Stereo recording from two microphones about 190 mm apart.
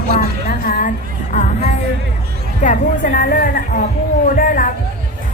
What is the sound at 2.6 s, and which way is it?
A woman's voice, 40° left (ahead or behind).